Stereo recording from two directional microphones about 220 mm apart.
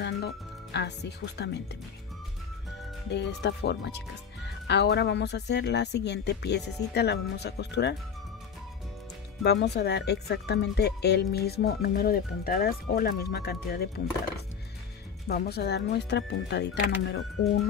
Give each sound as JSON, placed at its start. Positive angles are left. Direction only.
{"t": 0.0, "sound": "speech", "side_deg": 50}
{"t": 3.1, "sound": "speech", "side_deg": 50}
{"t": 9.4, "sound": "speech", "side_deg": 50}
{"t": 15.2, "sound": "speech", "side_deg": 45}